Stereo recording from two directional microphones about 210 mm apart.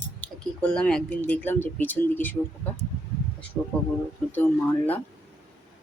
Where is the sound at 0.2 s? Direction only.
5° left (ahead or behind).